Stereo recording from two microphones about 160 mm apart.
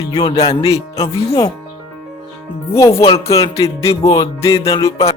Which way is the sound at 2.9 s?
35° left (ahead or behind).